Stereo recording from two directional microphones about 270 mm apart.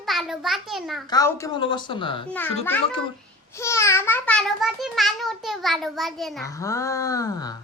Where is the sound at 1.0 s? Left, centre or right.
Centre.